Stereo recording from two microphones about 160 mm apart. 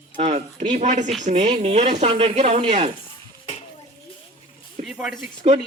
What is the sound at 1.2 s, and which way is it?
Speech, 45° right (ahead or behind).